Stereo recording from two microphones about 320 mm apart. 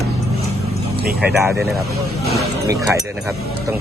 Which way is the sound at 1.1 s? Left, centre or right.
Centre.